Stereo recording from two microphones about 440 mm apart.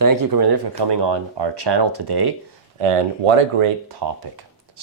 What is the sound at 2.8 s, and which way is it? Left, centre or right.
Speech, right.